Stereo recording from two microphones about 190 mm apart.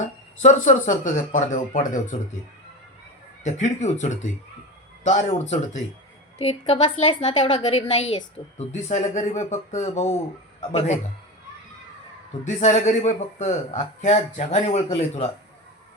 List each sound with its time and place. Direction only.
0.0 s a woman's voice: 40° left (ahead or behind)
3.4 s a woman's voice: 40° left (ahead or behind)
12.5 s a woman's voice: 40° left (ahead or behind)